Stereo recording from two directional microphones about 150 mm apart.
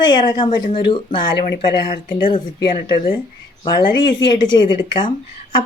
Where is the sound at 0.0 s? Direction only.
30° left (ahead or behind).